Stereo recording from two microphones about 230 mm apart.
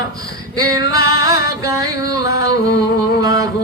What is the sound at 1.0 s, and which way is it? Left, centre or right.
Music, centre.